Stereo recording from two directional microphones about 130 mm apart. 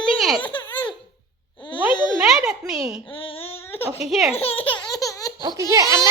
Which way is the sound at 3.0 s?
45° left (ahead or behind).